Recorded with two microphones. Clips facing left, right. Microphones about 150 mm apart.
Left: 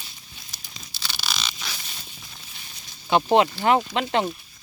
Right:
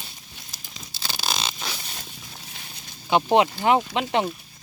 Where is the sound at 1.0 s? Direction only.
45° right (ahead or behind).